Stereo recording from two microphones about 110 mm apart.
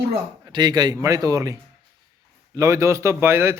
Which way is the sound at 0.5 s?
40° right (ahead or behind).